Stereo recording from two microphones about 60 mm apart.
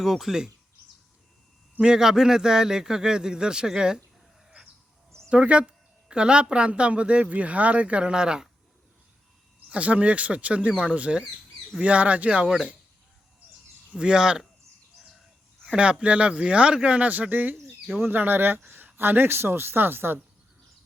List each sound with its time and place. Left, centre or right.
0.0 s speech: centre
1.8 s a man's voice: centre
5.3 s speech: centre
9.6 s a man's voice: right
13.9 s a man's voice: centre
15.6 s a woman's voice: centre; by 20.1 s right